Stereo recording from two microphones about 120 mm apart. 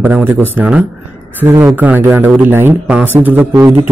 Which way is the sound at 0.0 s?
15° right (ahead or behind).